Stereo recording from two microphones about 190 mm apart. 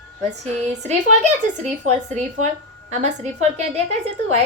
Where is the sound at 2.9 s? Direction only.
35° right (ahead or behind).